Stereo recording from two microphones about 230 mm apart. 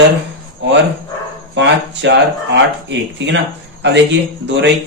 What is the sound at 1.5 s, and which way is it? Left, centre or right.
Speech, right.